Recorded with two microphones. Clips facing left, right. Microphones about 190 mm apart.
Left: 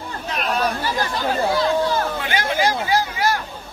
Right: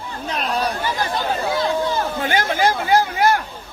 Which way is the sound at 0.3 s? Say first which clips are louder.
Even; 35° right (ahead or behind).